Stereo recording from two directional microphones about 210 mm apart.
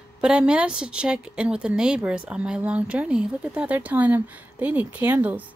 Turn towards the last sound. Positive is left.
turn(degrees=-10)  # may be behind; listen again after turning